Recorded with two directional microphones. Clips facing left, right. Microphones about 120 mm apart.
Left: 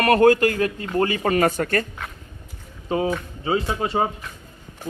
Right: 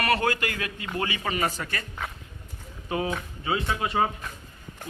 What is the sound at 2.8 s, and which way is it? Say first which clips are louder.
A man's voice: left 6 dB; 30° left (ahead or behind).